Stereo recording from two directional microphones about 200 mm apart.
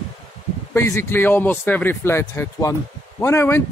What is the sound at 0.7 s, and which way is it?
Speech, 15° left (ahead or behind).